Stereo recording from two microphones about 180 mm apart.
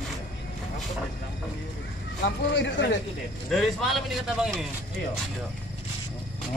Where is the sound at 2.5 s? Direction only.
80° left.